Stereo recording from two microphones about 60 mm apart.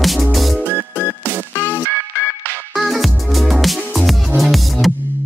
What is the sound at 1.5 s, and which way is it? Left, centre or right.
Music, left.